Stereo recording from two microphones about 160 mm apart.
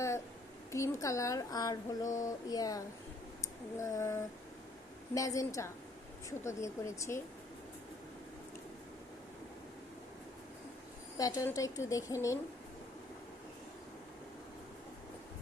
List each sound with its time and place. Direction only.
0.7 s a woman's voice: 20° left (ahead or behind)
11.2 s a woman's voice: 20° left (ahead or behind)